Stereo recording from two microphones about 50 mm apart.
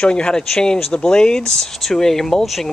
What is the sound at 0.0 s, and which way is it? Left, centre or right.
Speech, centre.